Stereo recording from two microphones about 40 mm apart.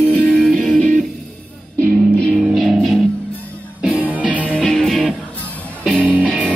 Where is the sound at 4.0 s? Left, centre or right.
Right.